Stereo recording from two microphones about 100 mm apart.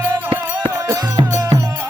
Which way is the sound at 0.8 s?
40° right (ahead or behind).